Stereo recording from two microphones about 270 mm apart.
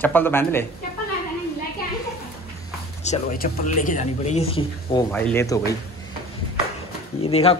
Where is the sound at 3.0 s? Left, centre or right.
Left; by 5.7 s centre.